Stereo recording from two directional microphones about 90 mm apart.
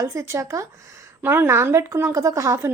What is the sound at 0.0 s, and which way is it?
A woman's voice, 35° right (ahead or behind).